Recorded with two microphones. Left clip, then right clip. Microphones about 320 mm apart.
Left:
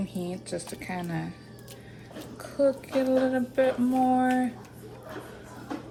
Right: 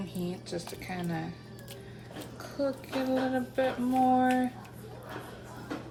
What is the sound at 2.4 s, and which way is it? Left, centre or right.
Speech, centre.